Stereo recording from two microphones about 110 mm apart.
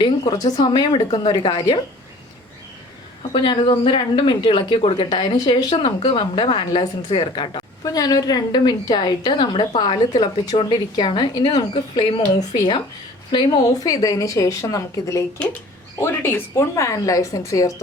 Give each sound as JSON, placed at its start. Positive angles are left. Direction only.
{"t": 0.0, "sound": "a woman's voice", "side_deg": 35}
{"t": 3.3, "sound": "a woman's voice", "side_deg": 45}
{"t": 5.2, "sound": "a woman's voice", "side_deg": 40}
{"t": 7.9, "sound": "a woman's voice", "side_deg": 35}